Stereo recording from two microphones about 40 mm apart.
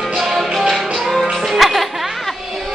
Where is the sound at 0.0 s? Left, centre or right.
Centre.